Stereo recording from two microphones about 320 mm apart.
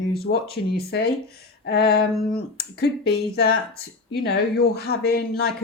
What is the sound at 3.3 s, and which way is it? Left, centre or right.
Speech, left.